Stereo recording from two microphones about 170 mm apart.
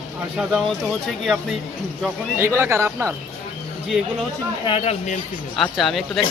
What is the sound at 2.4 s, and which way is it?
Speech, 15° right (ahead or behind).